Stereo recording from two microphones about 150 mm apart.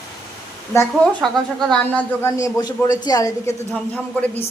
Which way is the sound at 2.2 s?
25° left (ahead or behind).